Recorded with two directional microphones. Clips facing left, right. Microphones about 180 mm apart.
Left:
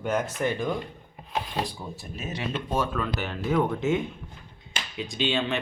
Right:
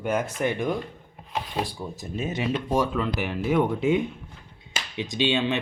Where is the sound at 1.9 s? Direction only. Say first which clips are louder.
Right 6 dB; 25° right (ahead or behind).